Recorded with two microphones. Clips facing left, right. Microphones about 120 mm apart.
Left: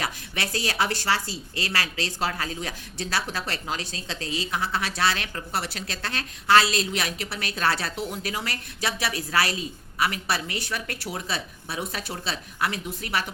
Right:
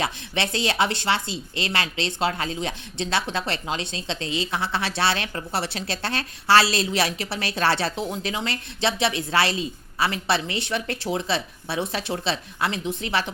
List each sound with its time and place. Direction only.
0.0 s speech: 25° right (ahead or behind)